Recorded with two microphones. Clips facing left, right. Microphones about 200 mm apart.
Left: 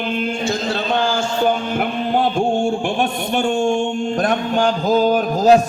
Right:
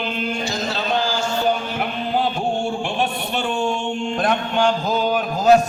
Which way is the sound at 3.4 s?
45° left (ahead or behind).